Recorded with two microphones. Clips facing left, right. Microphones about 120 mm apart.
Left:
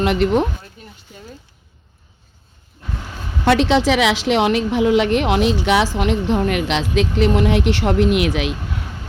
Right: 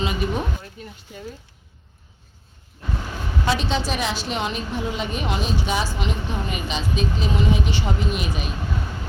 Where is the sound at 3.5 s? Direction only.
85° left.